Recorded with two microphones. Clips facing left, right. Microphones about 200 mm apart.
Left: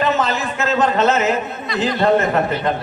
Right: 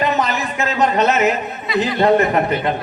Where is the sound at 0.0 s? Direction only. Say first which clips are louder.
Even; 15° right (ahead or behind).